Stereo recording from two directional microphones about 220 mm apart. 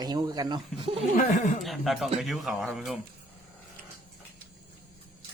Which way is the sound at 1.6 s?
Centre (ahead or behind).